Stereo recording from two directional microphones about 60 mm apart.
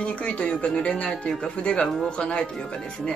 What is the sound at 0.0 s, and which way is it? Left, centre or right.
Speech, left.